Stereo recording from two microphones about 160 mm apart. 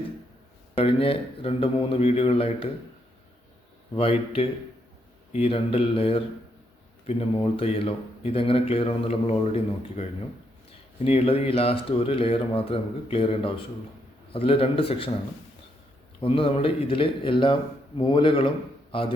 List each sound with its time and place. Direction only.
0.8 s speech: 35° left (ahead or behind)
3.9 s speech: 35° left (ahead or behind)
16.2 s speech: 35° left (ahead or behind)